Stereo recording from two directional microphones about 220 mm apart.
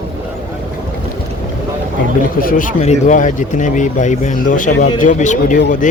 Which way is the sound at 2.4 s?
40° left (ahead or behind).